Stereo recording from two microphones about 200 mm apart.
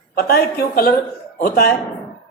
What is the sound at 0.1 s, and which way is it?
A man's voice, 50° left (ahead or behind).